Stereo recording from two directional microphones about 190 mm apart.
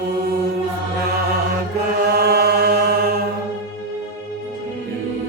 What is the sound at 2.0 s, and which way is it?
Mantra, 55° right (ahead or behind).